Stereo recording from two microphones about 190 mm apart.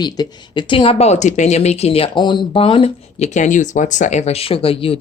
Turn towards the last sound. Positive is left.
turn(degrees=30)  # may be behind; listen again after turning